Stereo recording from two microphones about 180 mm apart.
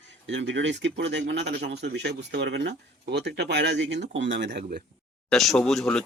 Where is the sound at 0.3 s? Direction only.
85° right.